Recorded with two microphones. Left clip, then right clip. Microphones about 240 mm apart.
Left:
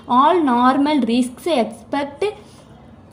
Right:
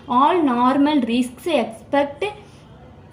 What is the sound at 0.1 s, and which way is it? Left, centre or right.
A woman's voice, left.